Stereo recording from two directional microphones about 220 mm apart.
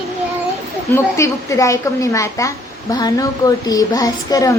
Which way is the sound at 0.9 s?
15° left (ahead or behind).